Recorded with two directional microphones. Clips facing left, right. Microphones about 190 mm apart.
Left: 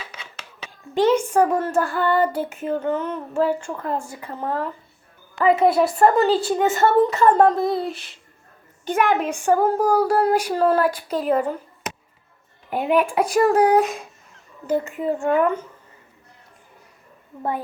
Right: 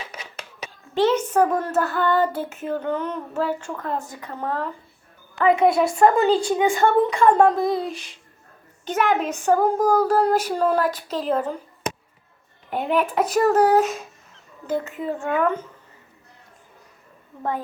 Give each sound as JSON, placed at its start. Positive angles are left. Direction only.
{"t": 0.9, "sound": "child singing", "side_deg": 10}
{"t": 5.4, "sound": "a woman's voice", "side_deg": 5}
{"t": 8.8, "sound": "child singing", "side_deg": 10}
{"t": 12.7, "sound": "child singing", "side_deg": 10}